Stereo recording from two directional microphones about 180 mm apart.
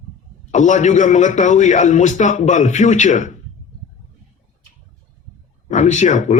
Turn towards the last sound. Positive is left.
turn(degrees=45)  # may be behind; listen again after turning